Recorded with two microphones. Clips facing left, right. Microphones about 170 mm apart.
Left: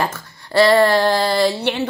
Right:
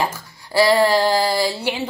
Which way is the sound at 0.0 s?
10° right (ahead or behind).